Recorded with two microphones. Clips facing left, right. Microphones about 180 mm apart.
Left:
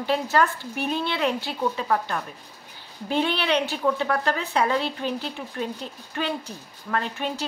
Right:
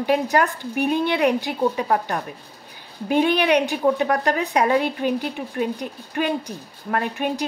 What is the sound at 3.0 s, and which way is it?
A woman's voice, 15° right (ahead or behind).